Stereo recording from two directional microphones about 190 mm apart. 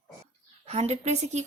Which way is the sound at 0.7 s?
35° right (ahead or behind).